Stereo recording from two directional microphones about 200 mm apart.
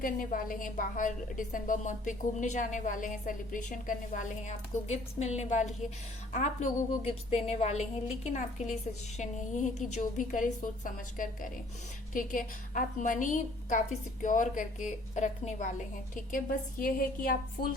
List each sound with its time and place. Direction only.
0.0 s a woman's voice: 40° left (ahead or behind)